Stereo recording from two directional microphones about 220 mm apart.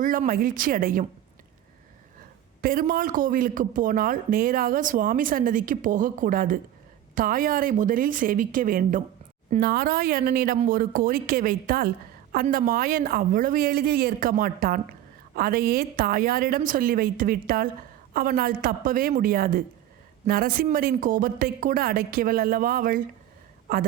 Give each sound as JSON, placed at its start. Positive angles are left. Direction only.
{"t": 0.0, "sound": "speech", "side_deg": -40}
{"t": 2.6, "sound": "a woman's voice", "side_deg": -40}